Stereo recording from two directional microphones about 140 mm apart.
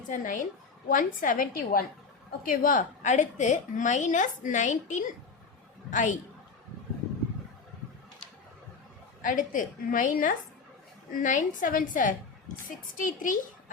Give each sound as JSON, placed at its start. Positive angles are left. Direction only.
{"t": 0.1, "sound": "a woman's voice", "side_deg": 65}
{"t": 9.2, "sound": "a woman's voice", "side_deg": 70}